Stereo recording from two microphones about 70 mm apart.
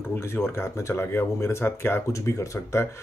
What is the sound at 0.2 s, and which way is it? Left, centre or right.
Speech, left.